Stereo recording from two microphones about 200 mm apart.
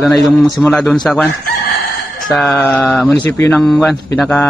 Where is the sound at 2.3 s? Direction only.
Centre (ahead or behind).